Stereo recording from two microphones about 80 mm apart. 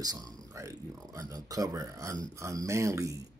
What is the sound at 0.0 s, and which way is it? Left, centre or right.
Speech, right.